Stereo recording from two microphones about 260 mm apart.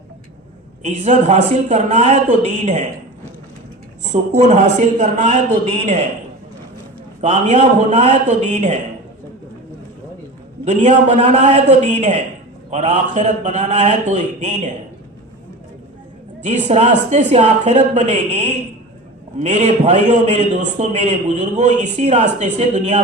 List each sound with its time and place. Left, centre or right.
0.9 s a man's voice: right
4.0 s a man's voice: right
7.2 s a man's voice: right
10.7 s a man's voice: right
16.4 s a man's voice: right